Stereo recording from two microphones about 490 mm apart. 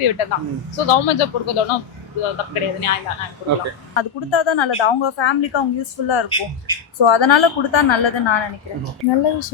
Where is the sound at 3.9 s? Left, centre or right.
Left.